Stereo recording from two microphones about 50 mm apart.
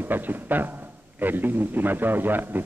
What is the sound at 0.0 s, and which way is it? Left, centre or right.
A man's voice, right.